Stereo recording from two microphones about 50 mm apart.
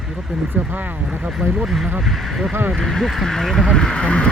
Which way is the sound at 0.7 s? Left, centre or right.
Right.